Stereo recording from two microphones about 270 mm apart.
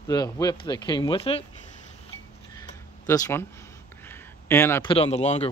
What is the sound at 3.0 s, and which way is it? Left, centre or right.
Speech, centre.